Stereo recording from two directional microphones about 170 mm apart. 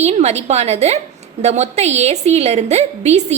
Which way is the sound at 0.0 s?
40° right (ahead or behind).